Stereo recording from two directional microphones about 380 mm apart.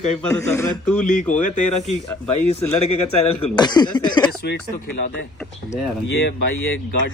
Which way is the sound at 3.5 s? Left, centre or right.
Centre.